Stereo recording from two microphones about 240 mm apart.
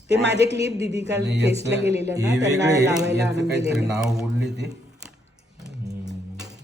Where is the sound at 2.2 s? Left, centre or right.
Centre.